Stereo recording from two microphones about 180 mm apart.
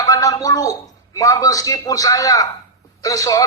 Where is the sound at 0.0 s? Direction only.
20° left (ahead or behind).